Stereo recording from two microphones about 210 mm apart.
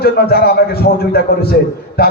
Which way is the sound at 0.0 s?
45° left (ahead or behind).